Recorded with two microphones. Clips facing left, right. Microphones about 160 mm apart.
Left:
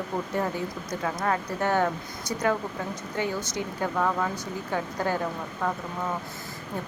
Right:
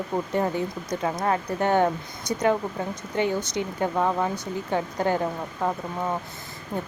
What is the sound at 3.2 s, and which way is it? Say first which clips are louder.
Speech: right 5 dB; 20° right (ahead or behind).